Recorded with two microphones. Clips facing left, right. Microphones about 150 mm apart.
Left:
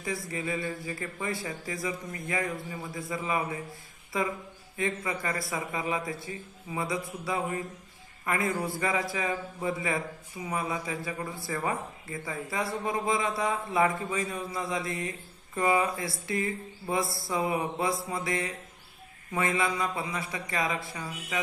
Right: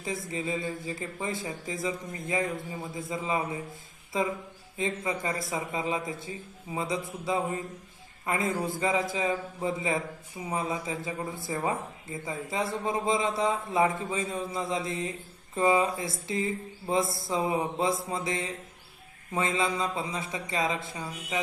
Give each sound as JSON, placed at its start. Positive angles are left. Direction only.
{"t": 0.3, "sound": "speech", "side_deg": -20}